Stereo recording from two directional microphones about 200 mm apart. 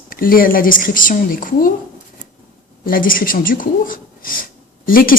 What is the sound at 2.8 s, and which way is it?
Speech, 45° left (ahead or behind).